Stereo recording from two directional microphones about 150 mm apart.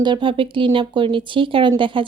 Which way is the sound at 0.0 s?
30° right (ahead or behind).